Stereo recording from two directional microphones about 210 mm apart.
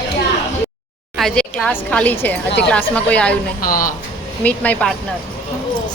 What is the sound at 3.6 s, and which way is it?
Speech, 40° left (ahead or behind).